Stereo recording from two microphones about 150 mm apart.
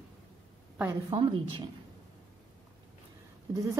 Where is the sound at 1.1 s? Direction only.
35° right (ahead or behind).